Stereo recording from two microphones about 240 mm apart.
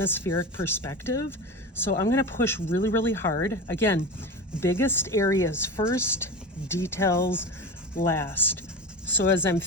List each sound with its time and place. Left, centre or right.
0.0 s speech: centre